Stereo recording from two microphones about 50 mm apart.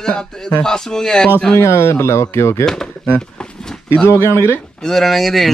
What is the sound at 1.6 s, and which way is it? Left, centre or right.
Speech, left.